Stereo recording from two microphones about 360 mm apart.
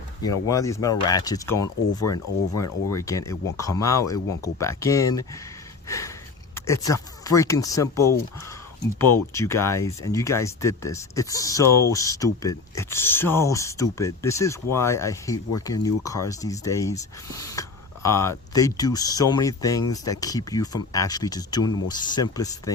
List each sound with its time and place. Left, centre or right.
0.2 s speech: centre
1.6 s speech: left
2.9 s speech: centre
6.5 s speech: centre